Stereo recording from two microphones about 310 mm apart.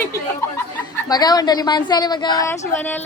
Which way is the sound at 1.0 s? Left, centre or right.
Centre.